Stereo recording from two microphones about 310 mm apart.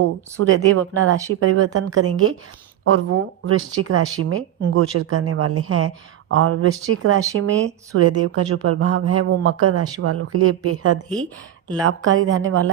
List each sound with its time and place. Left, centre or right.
0.4 s speech: right